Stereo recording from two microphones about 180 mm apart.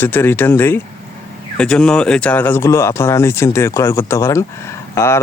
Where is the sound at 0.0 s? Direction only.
10° left (ahead or behind).